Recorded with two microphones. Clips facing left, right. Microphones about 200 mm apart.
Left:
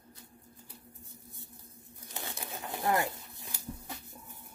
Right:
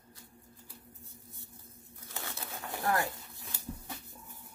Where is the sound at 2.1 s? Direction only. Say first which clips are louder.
Left 1 dB; 20° left (ahead or behind).